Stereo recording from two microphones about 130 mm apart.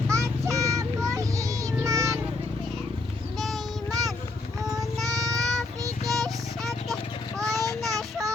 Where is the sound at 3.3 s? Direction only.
Centre (ahead or behind).